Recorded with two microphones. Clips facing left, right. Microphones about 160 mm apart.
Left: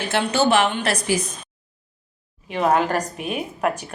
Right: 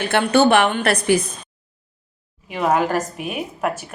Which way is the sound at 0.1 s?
60° right (ahead or behind).